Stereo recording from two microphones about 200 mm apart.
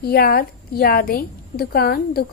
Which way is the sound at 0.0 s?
50° left (ahead or behind).